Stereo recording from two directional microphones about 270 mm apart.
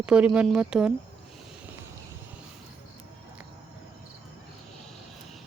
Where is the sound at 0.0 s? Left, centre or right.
Centre.